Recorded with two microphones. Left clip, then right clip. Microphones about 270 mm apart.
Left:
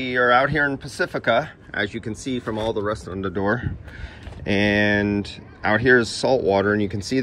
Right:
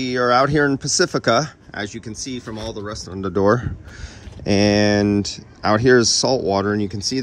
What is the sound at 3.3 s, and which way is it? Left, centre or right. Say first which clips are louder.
Speech: right 7 dB; right.